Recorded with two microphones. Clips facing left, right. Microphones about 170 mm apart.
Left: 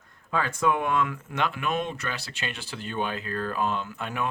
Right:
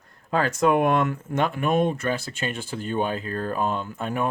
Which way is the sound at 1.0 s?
40° right (ahead or behind).